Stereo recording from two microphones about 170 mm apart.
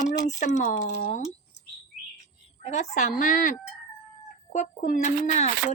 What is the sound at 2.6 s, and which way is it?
Speech, 40° left (ahead or behind).